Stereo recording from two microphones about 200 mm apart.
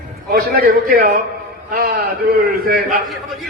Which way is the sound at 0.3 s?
50° right (ahead or behind).